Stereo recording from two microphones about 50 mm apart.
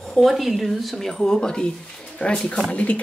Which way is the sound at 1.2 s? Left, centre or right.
Centre.